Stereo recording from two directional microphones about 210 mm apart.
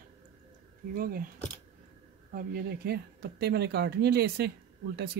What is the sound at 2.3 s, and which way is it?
Speech, 45° right (ahead or behind).